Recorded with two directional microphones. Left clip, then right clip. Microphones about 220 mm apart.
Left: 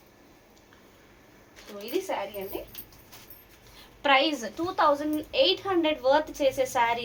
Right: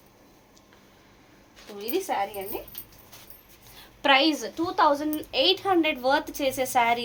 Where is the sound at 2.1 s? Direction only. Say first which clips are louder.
Right 6 dB; 45° right (ahead or behind).